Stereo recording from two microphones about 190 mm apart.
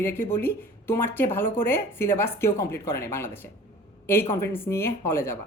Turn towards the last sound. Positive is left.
turn(degrees=15)  # may be behind; listen again after turning